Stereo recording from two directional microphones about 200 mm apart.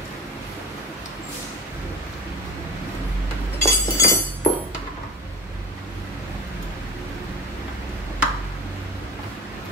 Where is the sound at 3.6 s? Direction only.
15° left (ahead or behind).